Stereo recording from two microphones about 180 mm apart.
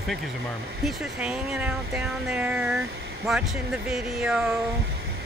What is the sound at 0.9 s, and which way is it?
Speech, 5° right (ahead or behind).